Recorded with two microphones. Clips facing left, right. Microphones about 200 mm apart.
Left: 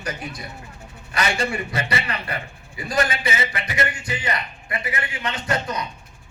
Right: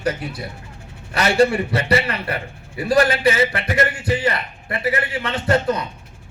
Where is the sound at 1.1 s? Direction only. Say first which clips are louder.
Right 8 dB; 60° right (ahead or behind).